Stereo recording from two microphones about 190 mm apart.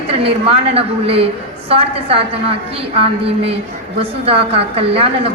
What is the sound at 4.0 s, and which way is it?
A woman's voice, 30° right (ahead or behind).